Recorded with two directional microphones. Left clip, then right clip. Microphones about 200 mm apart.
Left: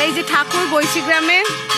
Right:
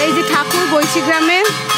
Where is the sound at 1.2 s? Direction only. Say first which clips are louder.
Right 1 dB; 15° right (ahead or behind).